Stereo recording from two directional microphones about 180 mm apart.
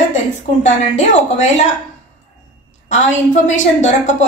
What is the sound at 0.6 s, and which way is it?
A woman's voice, 40° left (ahead or behind).